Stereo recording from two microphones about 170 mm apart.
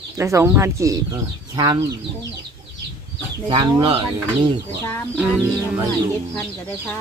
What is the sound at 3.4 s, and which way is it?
Speech, 30° right (ahead or behind).